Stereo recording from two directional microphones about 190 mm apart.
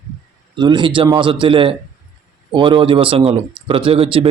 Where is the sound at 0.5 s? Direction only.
25° right (ahead or behind).